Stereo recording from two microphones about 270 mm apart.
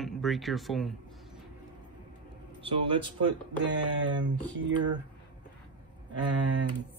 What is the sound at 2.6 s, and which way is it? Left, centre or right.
Speech, centre.